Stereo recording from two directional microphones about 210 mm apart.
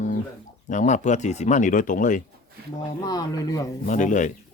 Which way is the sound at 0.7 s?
35° left (ahead or behind).